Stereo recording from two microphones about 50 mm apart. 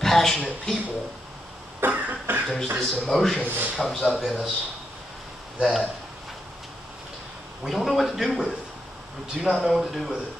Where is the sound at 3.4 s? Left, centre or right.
Right.